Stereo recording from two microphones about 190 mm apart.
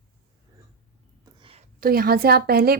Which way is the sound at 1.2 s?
30° right (ahead or behind).